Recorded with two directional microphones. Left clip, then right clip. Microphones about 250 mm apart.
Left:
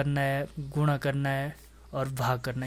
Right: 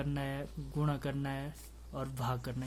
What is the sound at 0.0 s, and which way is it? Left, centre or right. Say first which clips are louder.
Speech: left 11 dB; left.